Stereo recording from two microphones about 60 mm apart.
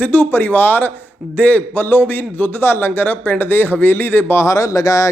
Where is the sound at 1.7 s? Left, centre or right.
Left.